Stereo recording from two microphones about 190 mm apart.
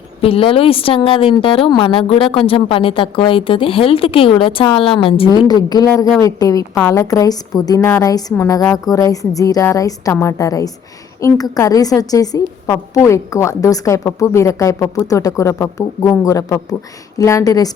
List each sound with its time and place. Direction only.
0.2 s a woman's voice: 30° left (ahead or behind)